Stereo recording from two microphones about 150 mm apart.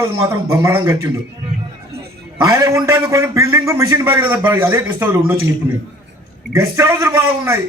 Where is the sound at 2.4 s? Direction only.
25° right (ahead or behind).